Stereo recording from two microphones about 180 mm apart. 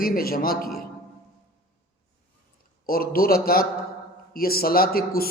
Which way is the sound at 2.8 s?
55° left (ahead or behind).